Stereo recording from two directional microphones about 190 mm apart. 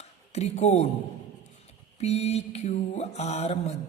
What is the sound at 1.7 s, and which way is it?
A man's voice, 35° left (ahead or behind).